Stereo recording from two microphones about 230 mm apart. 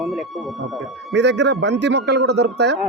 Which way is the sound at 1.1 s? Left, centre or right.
Right.